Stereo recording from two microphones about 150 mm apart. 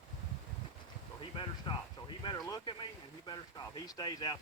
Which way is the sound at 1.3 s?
35° left (ahead or behind).